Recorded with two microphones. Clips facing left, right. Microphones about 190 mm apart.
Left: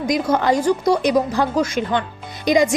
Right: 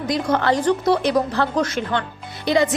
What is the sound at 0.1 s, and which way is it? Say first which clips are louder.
A woman's voice: left 2 dB; 10° left (ahead or behind).